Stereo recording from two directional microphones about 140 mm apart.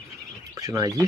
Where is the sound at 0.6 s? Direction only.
25° right (ahead or behind).